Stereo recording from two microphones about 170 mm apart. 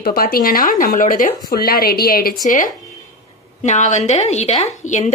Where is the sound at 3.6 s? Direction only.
45° left (ahead or behind).